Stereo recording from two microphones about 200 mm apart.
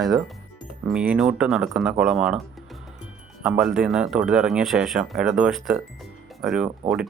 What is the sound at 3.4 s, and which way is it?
Speech, 5° right (ahead or behind).